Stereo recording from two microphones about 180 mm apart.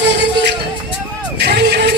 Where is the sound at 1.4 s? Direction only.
70° right (ahead or behind).